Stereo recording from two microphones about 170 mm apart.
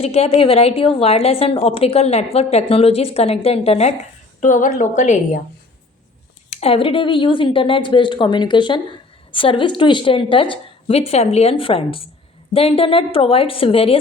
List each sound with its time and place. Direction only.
0.0 s a woman's voice: 40° left (ahead or behind)
4.4 s a woman's voice: 50° left (ahead or behind)
6.5 s a woman's voice: 35° left (ahead or behind)